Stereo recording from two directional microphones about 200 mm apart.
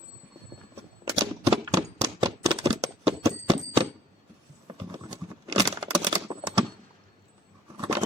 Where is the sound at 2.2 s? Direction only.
25° right (ahead or behind).